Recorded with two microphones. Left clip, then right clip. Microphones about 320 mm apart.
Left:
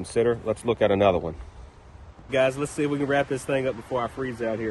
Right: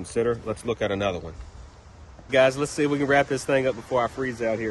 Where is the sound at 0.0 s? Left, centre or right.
Centre.